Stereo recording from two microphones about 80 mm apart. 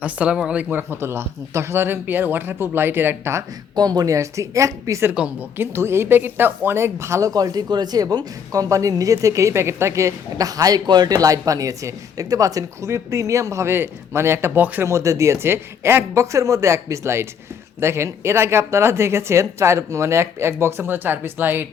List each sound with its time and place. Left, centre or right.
0.0 s speech: centre; by 3.4 s right
3.8 s a woman's voice: right